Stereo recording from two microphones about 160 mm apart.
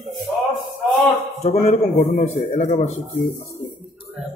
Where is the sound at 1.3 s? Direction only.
40° left (ahead or behind).